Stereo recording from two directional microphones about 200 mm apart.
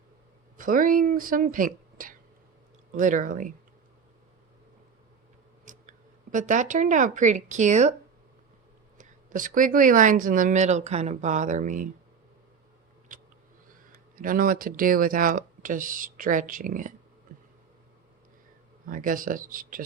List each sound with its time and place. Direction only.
0.5 s speech: 40° right (ahead or behind)
6.3 s speech: 40° right (ahead or behind)
9.0 s speech: 40° right (ahead or behind)
13.1 s a sound: 45° right (ahead or behind)
14.2 s speech: 45° right (ahead or behind)
17.3 s a sound: 45° right (ahead or behind)
18.9 s speech: 40° right (ahead or behind)